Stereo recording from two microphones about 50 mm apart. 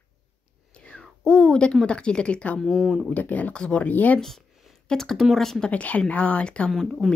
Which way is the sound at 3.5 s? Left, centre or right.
Centre.